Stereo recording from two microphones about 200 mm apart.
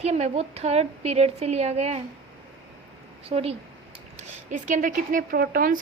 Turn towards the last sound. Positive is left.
turn(degrees=-45)  # may be behind; listen again after turning